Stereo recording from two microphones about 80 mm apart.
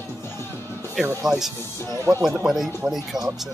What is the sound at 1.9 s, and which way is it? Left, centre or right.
Speech, right.